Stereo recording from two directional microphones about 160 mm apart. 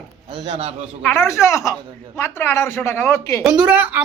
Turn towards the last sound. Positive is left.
turn(degrees=-10)  # may be behind; listen again after turning